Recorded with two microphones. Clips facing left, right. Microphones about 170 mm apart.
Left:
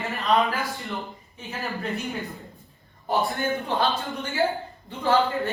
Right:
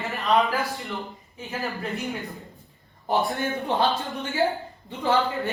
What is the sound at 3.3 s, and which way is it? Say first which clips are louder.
Speech: even; 20° right (ahead or behind).